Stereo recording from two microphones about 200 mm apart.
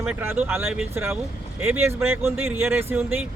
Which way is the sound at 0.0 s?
10° right (ahead or behind).